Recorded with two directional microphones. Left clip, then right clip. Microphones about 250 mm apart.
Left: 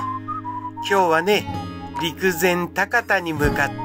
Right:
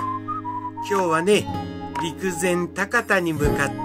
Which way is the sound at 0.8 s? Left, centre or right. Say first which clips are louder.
Left 3 dB; centre.